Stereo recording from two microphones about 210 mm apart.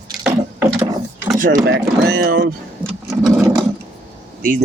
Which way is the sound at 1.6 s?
50° right (ahead or behind).